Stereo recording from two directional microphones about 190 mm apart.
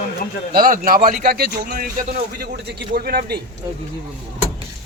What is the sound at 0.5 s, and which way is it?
Speech, 50° right (ahead or behind).